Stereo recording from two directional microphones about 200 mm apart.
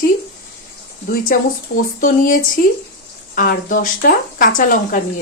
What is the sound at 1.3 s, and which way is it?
Speech, 45° left (ahead or behind).